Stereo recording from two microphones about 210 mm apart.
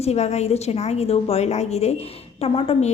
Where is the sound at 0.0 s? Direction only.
30° left (ahead or behind).